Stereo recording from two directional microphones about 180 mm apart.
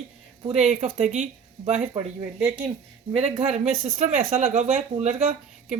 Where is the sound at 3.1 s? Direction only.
35° right (ahead or behind).